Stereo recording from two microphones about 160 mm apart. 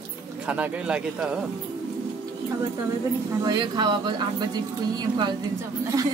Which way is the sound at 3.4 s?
25° right (ahead or behind).